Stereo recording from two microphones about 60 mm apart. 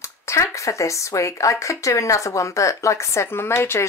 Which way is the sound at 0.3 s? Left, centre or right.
Left.